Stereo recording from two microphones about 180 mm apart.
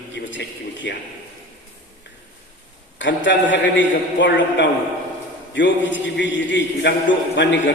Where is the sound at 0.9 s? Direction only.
70° left (ahead or behind).